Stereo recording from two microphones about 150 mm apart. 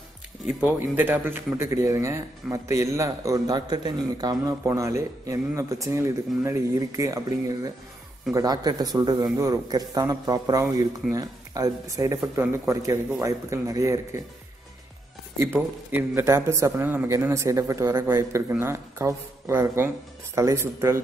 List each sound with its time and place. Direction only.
0.5 s a man's voice: 10° right (ahead or behind)
15.3 s speech: 15° right (ahead or behind)